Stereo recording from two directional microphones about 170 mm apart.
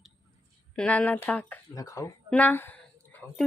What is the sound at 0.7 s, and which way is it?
Speech, 5° left (ahead or behind).